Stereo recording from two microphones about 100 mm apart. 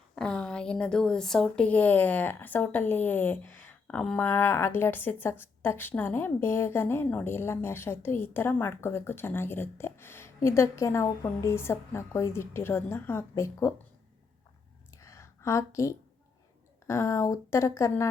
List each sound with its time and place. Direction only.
0.2 s speech: 10° left (ahead or behind)
4.2 s a woman's voice: 20° left (ahead or behind)
15.0 s a sound: 30° left (ahead or behind)
16.8 s a woman's voice: 30° left (ahead or behind)